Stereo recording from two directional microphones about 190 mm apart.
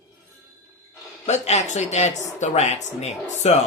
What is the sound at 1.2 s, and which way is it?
Speech, 35° left (ahead or behind).